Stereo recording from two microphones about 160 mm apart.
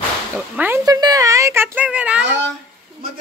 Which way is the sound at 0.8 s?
20° right (ahead or behind).